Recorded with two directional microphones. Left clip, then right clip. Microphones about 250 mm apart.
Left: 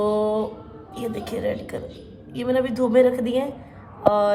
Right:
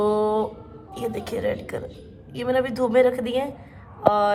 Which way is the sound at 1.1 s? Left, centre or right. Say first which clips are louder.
Even; centre.